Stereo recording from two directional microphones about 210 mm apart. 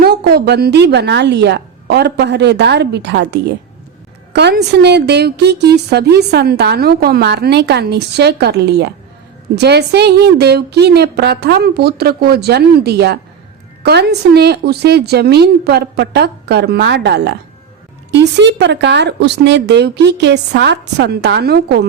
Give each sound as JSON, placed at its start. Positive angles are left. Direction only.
{"t": 0.0, "sound": "a woman's voice", "side_deg": -50}